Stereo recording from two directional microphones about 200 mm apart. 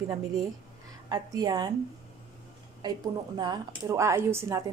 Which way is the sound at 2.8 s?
20° right (ahead or behind).